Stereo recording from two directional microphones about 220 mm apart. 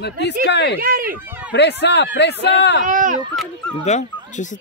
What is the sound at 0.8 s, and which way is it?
Speech, 40° right (ahead or behind).